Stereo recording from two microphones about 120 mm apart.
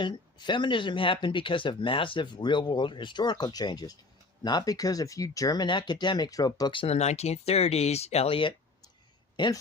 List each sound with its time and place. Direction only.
0.0 s speech: 40° left (ahead or behind)
6.8 s speech: 65° left (ahead or behind); by 8.5 s 50° left (ahead or behind)
9.3 s speech: 40° left (ahead or behind)